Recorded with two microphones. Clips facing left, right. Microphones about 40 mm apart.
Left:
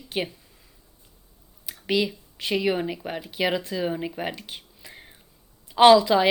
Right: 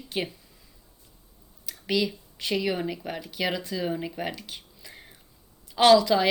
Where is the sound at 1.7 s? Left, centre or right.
Centre.